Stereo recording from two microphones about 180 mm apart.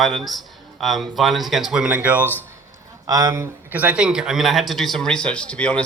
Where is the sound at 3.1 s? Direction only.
20° right (ahead or behind).